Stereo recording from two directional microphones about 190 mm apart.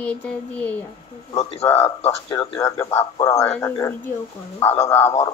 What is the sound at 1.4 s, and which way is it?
Speech, 30° left (ahead or behind).